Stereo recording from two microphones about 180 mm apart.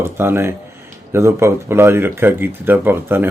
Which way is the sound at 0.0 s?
15° right (ahead or behind).